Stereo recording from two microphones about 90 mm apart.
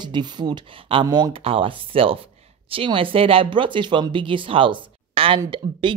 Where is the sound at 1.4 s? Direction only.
85° right.